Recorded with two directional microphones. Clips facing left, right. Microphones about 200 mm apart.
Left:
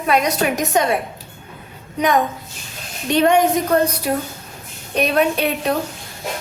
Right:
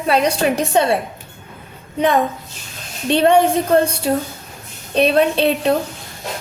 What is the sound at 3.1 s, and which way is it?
Speech, 30° right (ahead or behind).